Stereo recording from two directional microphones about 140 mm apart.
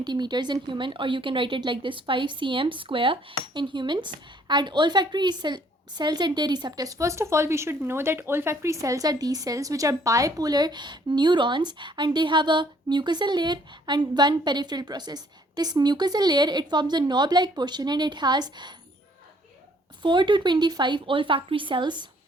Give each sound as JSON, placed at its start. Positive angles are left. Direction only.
{"t": 0.0, "sound": "a woman's voice", "side_deg": -30}
{"t": 20.0, "sound": "a woman's voice", "side_deg": -35}